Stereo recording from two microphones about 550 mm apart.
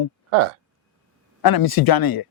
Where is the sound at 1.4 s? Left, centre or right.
Left.